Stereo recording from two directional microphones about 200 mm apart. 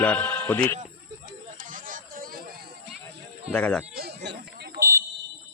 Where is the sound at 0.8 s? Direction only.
35° right (ahead or behind).